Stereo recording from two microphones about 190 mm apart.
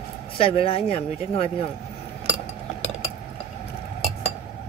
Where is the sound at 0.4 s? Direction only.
30° left (ahead or behind).